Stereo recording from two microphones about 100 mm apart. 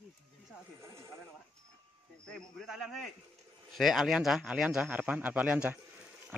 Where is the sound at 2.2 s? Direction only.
5° left (ahead or behind); by 5.8 s 15° right (ahead or behind).